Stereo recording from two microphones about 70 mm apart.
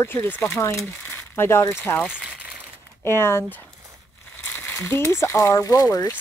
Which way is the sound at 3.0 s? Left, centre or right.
Left.